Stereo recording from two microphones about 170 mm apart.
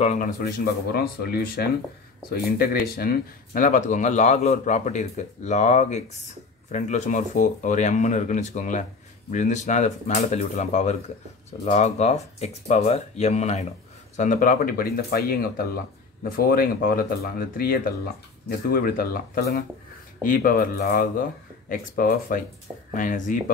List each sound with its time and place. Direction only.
0.0 s speech: 45° left (ahead or behind)
0.9 s speech: 65° left (ahead or behind); by 23.3 s 50° left (ahead or behind)